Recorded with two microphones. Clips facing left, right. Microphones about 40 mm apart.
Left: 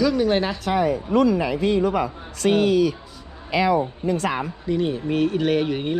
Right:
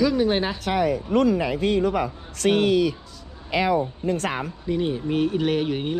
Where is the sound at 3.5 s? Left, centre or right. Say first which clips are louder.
Left 2 dB; left.